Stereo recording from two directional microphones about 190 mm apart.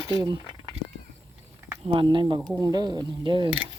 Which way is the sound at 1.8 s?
25° right (ahead or behind).